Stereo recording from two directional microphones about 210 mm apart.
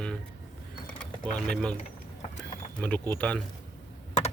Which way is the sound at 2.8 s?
5° left (ahead or behind).